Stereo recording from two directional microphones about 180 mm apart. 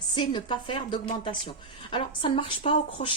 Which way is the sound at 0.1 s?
25° left (ahead or behind).